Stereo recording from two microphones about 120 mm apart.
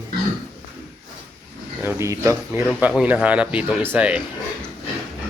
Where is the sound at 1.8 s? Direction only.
20° right (ahead or behind).